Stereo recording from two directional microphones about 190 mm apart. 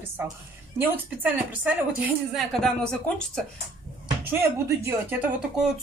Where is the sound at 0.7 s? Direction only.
10° right (ahead or behind).